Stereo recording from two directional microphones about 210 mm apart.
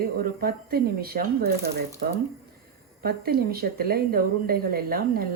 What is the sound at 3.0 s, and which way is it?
A woman's voice, 50° right (ahead or behind).